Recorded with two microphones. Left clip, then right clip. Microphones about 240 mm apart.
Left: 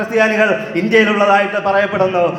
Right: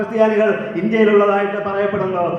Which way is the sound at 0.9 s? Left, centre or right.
Left.